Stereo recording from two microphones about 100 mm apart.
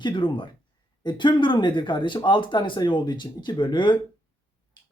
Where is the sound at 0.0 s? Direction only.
50° left (ahead or behind).